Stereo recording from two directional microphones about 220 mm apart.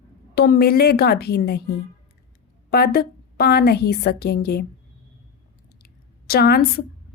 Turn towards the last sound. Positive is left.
turn(degrees=45)  # may be behind; listen again after turning